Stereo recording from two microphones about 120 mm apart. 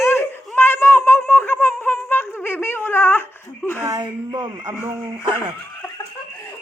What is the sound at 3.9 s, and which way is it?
Speech, 35° right (ahead or behind).